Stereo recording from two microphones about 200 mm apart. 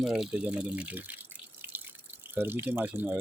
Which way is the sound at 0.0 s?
Centre (ahead or behind).